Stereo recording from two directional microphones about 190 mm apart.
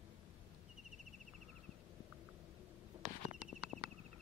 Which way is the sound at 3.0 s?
40° right (ahead or behind).